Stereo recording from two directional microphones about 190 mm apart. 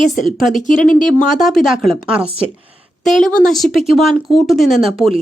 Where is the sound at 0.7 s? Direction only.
45° left (ahead or behind).